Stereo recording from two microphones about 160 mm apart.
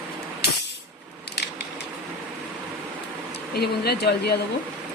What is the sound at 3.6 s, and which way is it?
Speech, 85° left.